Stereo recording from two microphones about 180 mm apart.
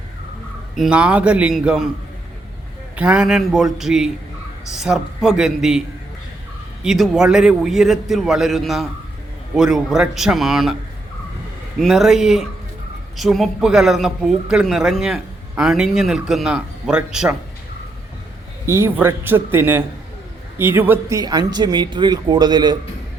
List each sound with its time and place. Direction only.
0.8 s speech: 5° right (ahead or behind)
2.9 s speech: 5° right (ahead or behind)
6.8 s speech: centre (ahead or behind)
11.8 s speech: centre (ahead or behind)
18.6 s a man's voice: 15° right (ahead or behind)